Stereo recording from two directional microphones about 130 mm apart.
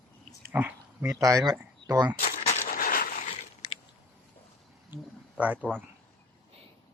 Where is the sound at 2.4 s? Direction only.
60° left (ahead or behind); by 3.3 s 90° left.